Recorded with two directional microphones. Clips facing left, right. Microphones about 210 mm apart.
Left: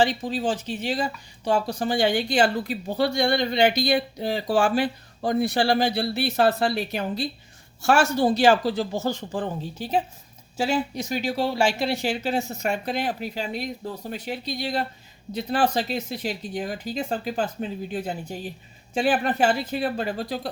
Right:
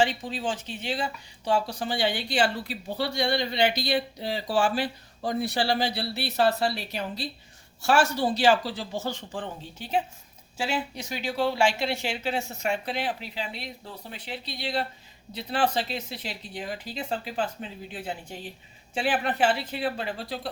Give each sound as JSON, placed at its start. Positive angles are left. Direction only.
{"t": 0.0, "sound": "speech", "side_deg": 40}